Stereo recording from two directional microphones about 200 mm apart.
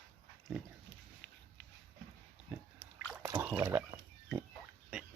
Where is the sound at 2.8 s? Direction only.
10° left (ahead or behind).